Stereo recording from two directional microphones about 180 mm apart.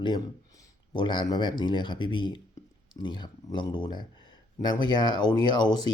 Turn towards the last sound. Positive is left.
turn(degrees=25)  # may be behind; listen again after turning